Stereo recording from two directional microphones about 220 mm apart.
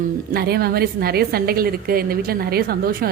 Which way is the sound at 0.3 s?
45° right (ahead or behind).